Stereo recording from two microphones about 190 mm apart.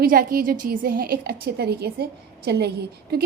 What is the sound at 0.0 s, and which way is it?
A woman's voice, 50° right (ahead or behind).